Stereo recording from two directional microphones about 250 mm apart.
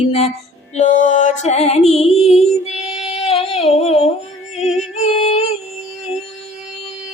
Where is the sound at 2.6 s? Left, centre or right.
Left.